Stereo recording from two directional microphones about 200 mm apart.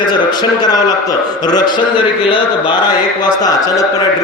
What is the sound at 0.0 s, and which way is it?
A man's voice, 20° left (ahead or behind).